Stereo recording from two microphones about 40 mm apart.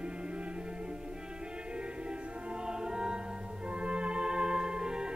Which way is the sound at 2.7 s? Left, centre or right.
Centre.